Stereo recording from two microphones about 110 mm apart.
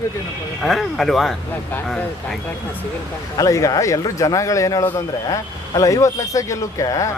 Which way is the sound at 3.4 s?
30° left (ahead or behind).